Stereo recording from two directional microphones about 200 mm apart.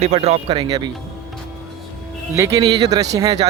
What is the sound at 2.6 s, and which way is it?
Speech, 20° right (ahead or behind).